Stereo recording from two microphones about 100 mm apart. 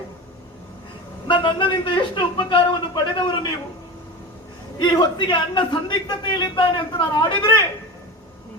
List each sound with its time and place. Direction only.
1.3 s a man's voice: 55° left (ahead or behind)
4.8 s a man's voice: 50° left (ahead or behind)